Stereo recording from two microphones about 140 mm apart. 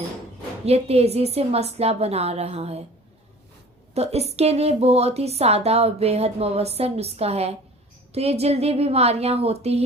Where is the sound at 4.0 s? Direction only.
50° right (ahead or behind).